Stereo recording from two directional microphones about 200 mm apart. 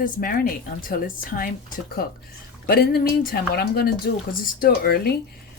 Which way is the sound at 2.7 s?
50° left (ahead or behind).